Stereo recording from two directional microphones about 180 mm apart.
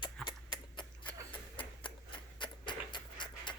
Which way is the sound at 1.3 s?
30° left (ahead or behind).